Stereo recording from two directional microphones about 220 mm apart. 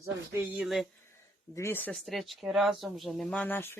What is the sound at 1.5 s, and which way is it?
Speech, 10° left (ahead or behind).